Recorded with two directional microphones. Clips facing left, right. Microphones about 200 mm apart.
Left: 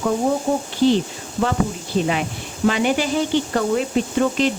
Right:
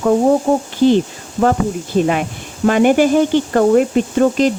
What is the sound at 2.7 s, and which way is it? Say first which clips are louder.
Speech: right 8 dB; 50° right (ahead or behind).